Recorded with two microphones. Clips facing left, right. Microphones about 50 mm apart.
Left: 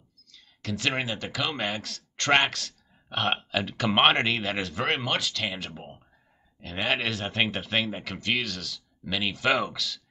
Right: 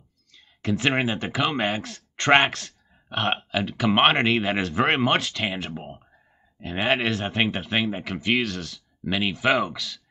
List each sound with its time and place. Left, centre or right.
0.3 s speech: right
2.1 s a sound: right
2.4 s speech: centre
7.1 s speech: centre
9.0 s speech: right
9.3 s speech: centre